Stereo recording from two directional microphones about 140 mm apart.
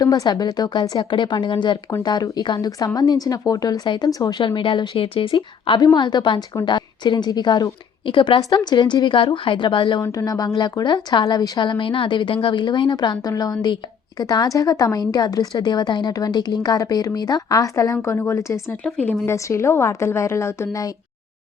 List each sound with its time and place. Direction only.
0.0 s a woman's voice: 30° left (ahead or behind)
10.0 s a woman's voice: 25° left (ahead or behind)
18.8 s a woman's voice: 10° left (ahead or behind)